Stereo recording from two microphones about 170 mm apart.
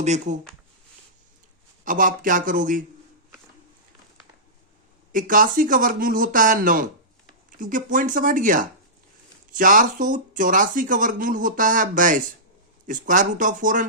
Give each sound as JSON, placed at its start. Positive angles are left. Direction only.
{"t": 0.0, "sound": "speech", "side_deg": -45}
{"t": 1.8, "sound": "speech", "side_deg": -50}
{"t": 5.1, "sound": "speech", "side_deg": -50}